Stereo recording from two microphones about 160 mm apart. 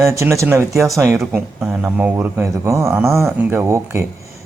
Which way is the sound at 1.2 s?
5° right (ahead or behind).